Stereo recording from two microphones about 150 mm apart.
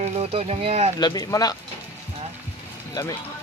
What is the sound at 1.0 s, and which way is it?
Speech, 25° left (ahead or behind).